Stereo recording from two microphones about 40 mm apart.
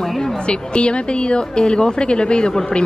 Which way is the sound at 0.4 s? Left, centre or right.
Left.